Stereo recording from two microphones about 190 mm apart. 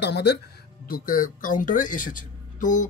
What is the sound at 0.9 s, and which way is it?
Speech, 50° left (ahead or behind).